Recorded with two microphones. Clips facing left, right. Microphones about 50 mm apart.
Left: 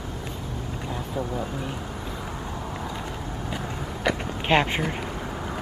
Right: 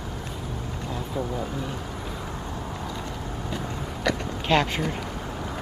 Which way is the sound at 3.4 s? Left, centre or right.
Centre.